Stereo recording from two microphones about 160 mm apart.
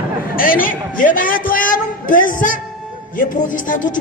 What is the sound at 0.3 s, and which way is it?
A man's voice, 60° left (ahead or behind).